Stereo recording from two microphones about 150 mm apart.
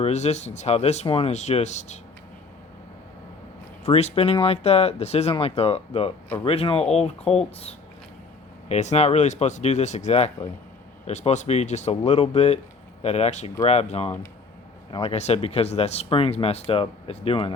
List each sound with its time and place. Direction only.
0.0 s speech: 45° left (ahead or behind)
3.8 s speech: 45° left (ahead or behind)